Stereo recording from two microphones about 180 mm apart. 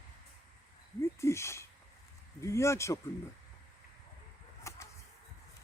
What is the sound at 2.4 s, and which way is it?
Speech, 15° left (ahead or behind).